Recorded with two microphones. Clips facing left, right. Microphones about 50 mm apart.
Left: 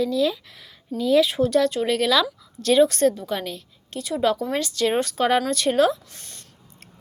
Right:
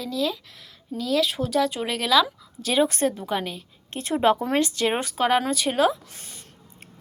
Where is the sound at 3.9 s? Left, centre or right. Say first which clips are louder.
Right 2 dB; right; by 5.1 s centre.